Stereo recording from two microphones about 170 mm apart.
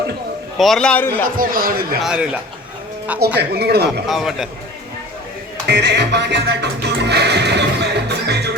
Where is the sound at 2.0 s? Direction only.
5° right (ahead or behind).